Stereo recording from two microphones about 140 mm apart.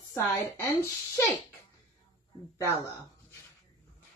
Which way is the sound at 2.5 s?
20° left (ahead or behind).